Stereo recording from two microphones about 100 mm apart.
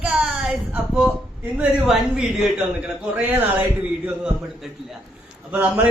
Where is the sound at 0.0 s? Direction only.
10° right (ahead or behind).